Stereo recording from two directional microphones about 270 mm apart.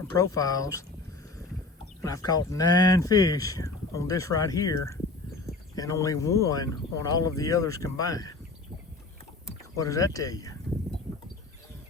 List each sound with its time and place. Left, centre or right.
0.1 s speech: centre
2.0 s speech: centre
9.7 s speech: centre